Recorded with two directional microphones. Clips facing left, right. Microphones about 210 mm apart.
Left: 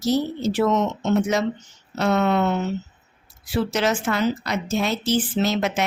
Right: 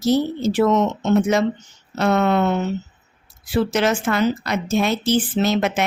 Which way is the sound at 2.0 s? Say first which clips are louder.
Right 2 dB; 55° right (ahead or behind).